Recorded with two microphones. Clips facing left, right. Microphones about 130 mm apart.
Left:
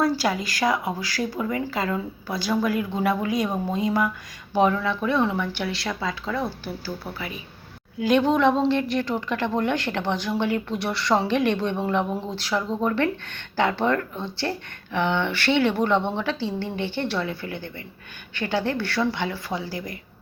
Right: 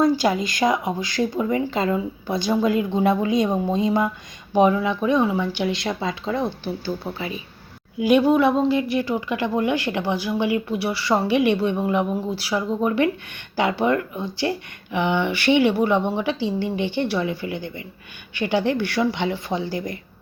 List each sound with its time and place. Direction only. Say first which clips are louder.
0.0 s speech: right 4 dB; 20° right (ahead or behind)
7.9 s speech: right 3 dB; 10° right (ahead or behind)